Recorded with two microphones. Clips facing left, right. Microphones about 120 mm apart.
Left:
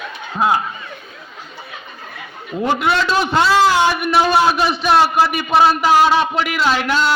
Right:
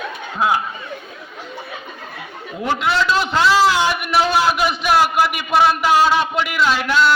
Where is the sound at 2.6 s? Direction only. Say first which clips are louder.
Left 1 dB; 25° left (ahead or behind); by 7.1 s 40° left (ahead or behind).